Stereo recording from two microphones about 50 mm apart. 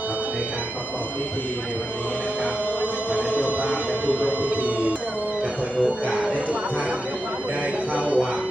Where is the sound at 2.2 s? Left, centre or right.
Right.